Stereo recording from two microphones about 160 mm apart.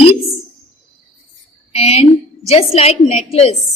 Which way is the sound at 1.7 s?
40° left (ahead or behind).